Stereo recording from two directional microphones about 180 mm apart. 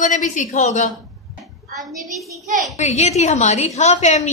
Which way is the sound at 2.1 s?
Centre (ahead or behind).